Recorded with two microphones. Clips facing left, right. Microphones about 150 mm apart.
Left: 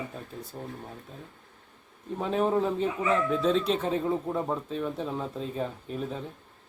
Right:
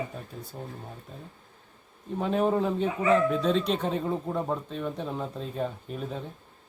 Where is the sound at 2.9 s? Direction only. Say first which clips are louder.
Right 3 dB; 35° right (ahead or behind).